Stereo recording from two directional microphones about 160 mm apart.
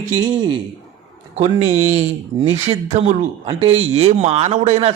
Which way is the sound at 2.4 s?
40° right (ahead or behind).